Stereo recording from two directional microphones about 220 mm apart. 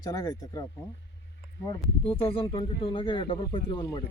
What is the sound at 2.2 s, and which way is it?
Speech, 25° left (ahead or behind).